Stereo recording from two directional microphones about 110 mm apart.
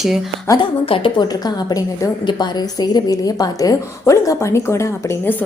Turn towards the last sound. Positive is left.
turn(degrees=25)  # may be behind; listen again after turning